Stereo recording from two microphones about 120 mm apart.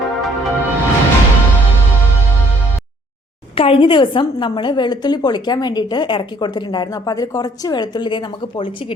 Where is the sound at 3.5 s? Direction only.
50° left (ahead or behind).